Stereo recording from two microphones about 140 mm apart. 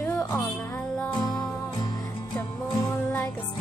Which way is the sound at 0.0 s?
15° left (ahead or behind).